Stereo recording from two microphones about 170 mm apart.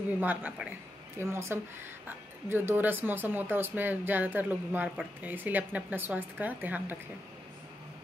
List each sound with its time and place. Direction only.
0.2 s speech: 10° right (ahead or behind)